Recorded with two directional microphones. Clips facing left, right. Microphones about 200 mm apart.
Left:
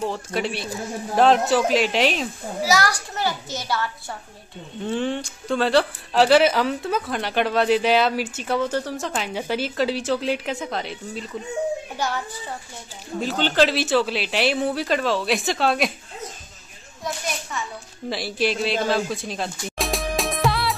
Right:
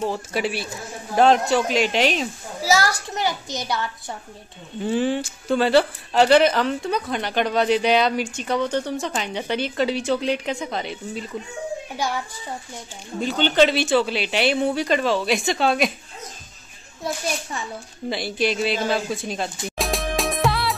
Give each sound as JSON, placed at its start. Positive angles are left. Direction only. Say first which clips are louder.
{"t": 0.0, "sound": "speech", "louder": "right 1 dB", "side_deg": -5}
{"t": 3.2, "sound": "a woman's voice", "louder": "right 1 dB", "side_deg": -15}
{"t": 4.8, "sound": "speech", "louder": "right 3 dB", "side_deg": -5}
{"t": 12.0, "sound": "a woman's voice", "louder": "right 1 dB", "side_deg": -10}
{"t": 13.2, "sound": "speech", "louder": "right 2 dB", "side_deg": 0}
{"t": 17.0, "sound": "a child's voice", "louder": "right 3 dB", "side_deg": -30}
{"t": 18.1, "sound": "speech", "louder": "even", "side_deg": 0}
{"t": 19.8, "sound": "music", "louder": "right 1 dB", "side_deg": 0}